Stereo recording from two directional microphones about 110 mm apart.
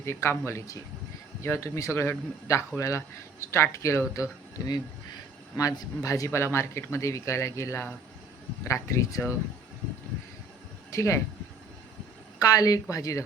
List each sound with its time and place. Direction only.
0.0 s speech: 20° left (ahead or behind)
10.9 s speech: 25° left (ahead or behind)
12.4 s speech: 35° left (ahead or behind)